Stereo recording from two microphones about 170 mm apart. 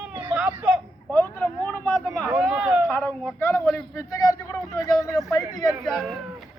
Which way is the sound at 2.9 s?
10° left (ahead or behind).